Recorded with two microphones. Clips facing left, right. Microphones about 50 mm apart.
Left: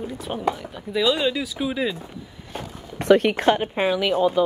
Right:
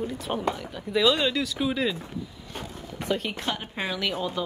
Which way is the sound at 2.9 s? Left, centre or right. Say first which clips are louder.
Left 12 dB; left.